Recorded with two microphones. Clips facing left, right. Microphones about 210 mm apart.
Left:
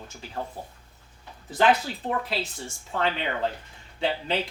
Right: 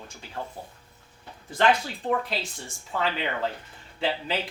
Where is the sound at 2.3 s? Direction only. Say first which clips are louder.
Left 2 dB; centre (ahead or behind).